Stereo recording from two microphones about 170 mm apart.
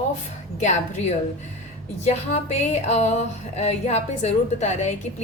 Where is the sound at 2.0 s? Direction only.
40° left (ahead or behind).